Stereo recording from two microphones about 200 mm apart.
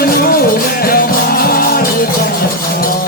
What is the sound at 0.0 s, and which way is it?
Music, 50° left (ahead or behind).